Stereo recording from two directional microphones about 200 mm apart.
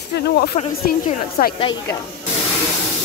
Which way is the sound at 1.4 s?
45° left (ahead or behind).